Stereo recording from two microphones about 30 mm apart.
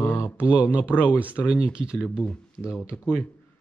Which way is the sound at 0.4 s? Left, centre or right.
Right.